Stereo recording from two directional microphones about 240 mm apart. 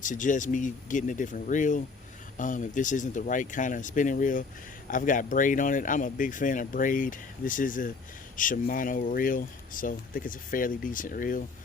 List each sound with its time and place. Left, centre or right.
0.0 s speech: left